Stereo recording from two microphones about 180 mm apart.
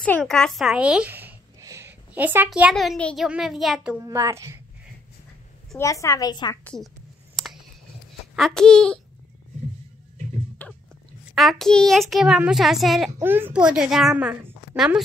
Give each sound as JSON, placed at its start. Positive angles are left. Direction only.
{"t": 0.0, "sound": "a child's voice", "side_deg": 5}
{"t": 4.0, "sound": "a woman's voice", "side_deg": -15}
{"t": 5.8, "sound": "a woman's voice", "side_deg": 15}
{"t": 6.6, "sound": "a child's voice", "side_deg": 5}
{"t": 8.4, "sound": "a child's voice", "side_deg": 5}
{"t": 10.6, "sound": "a sound", "side_deg": 10}
{"t": 11.3, "sound": "a child's voice", "side_deg": 0}
{"t": 13.2, "sound": "a child's voice", "side_deg": -10}